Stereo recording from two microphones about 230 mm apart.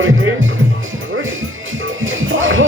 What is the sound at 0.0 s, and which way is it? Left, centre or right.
Music, right.